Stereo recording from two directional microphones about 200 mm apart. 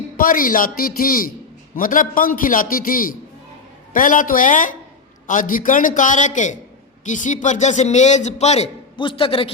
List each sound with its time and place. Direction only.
0.2 s a man's voice: 45° left (ahead or behind); by 9.5 s 25° left (ahead or behind)